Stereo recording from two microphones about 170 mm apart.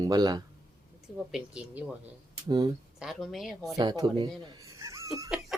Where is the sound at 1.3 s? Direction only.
5° right (ahead or behind).